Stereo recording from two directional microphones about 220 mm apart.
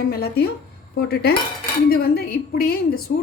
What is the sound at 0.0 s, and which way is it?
A woman's voice, 45° left (ahead or behind).